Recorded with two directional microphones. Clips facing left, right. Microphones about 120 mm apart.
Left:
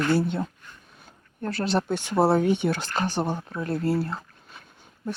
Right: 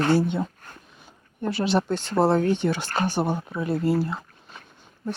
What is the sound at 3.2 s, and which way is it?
Speech, 5° right (ahead or behind).